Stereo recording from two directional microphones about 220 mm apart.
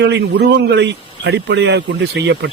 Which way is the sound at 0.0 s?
50° right (ahead or behind).